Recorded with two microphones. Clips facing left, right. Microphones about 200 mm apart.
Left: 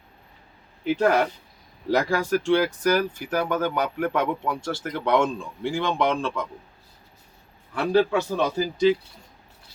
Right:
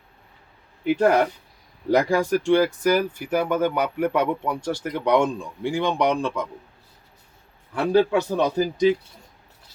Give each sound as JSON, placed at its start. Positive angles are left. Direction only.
{"t": 0.9, "sound": "speech", "side_deg": -15}
{"t": 7.9, "sound": "speech", "side_deg": -15}